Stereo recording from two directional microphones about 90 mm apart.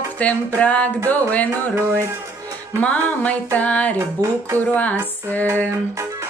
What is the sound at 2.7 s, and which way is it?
Speech, 15° left (ahead or behind).